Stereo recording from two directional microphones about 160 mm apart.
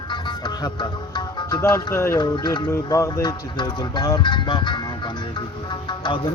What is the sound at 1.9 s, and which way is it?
Speech, 15° left (ahead or behind).